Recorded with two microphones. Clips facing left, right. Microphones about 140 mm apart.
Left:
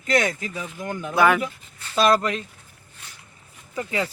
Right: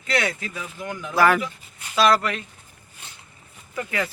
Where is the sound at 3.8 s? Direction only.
15° left (ahead or behind).